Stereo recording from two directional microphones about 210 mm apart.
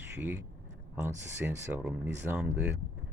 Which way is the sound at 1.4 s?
10° right (ahead or behind).